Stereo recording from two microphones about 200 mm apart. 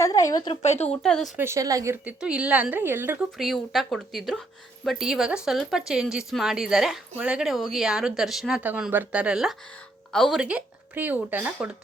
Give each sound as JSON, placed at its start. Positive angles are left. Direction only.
{"t": 0.0, "sound": "a sound", "side_deg": 15}
{"t": 0.6, "sound": "speech", "side_deg": 35}
{"t": 0.9, "sound": "speech", "side_deg": 5}
{"t": 1.4, "sound": "a woman's voice", "side_deg": -15}
{"t": 3.3, "sound": "a woman's voice", "side_deg": 0}